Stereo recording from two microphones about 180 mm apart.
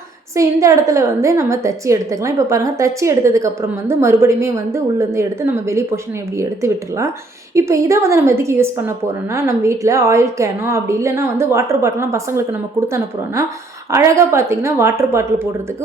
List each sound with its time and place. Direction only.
0.3 s a woman's voice: 15° right (ahead or behind)
13.9 s a woman's voice: 15° right (ahead or behind)